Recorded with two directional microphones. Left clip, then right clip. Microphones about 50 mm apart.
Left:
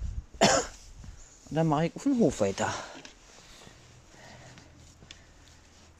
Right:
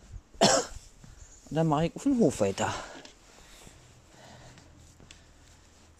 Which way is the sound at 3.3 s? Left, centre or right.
Centre.